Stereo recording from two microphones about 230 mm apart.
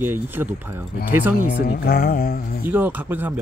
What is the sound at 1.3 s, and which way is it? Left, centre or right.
A woman's voice, left.